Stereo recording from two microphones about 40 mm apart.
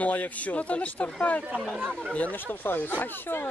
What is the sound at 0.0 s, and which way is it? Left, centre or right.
Speech, left.